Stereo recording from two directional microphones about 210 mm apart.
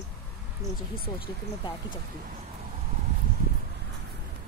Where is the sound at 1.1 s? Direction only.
25° left (ahead or behind).